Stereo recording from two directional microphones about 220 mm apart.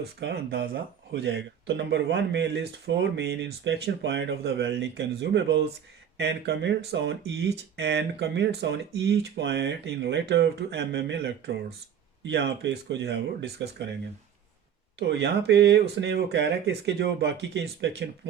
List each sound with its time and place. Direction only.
0.2 s speech: 50° right (ahead or behind)
14.9 s speech: 50° right (ahead or behind)